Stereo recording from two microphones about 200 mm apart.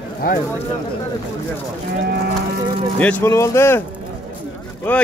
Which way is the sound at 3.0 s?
10° left (ahead or behind).